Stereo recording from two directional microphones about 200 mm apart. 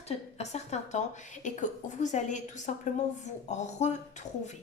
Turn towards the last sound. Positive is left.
turn(degrees=35)  # may be behind; listen again after turning